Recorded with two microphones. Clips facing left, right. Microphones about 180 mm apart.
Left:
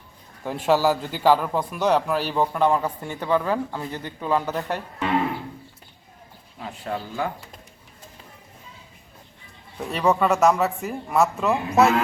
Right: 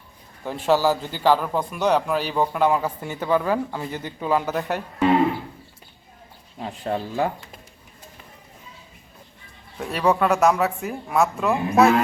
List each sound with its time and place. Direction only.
0.4 s a man's voice: 5° left (ahead or behind); by 4.8 s 10° right (ahead or behind)
6.6 s speech: 30° right (ahead or behind)
9.7 s a man's voice: centre (ahead or behind)